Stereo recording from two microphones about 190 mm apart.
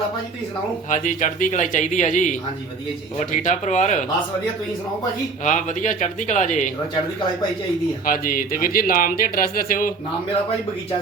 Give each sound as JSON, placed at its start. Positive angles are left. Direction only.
{"t": 0.9, "sound": "speech", "side_deg": 40}
{"t": 5.5, "sound": "speech", "side_deg": 40}
{"t": 8.0, "sound": "speech", "side_deg": 50}